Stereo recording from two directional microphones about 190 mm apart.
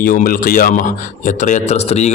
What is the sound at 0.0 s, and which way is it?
A man's voice, 50° left (ahead or behind).